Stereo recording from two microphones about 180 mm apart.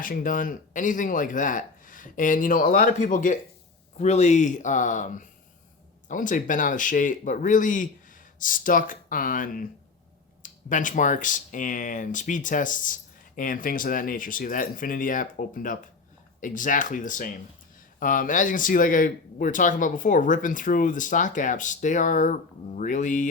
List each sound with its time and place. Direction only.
0.0 s speech: 50° left (ahead or behind)